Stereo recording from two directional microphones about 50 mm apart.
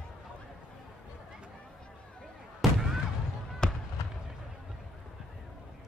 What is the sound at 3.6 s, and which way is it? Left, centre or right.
Fireworks, centre.